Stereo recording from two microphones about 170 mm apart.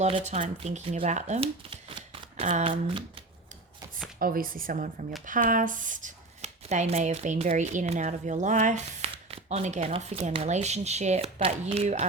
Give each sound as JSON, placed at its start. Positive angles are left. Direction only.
{"t": 0.0, "sound": "speech", "side_deg": -40}
{"t": 4.2, "sound": "speech", "side_deg": -55}